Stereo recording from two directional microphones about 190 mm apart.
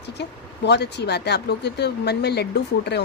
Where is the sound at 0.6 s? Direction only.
65° left (ahead or behind).